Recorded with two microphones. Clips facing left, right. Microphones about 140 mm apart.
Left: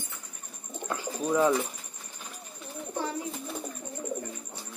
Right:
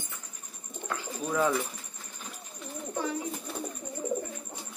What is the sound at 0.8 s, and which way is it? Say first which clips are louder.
Bird: left 4 dB; 20° left (ahead or behind).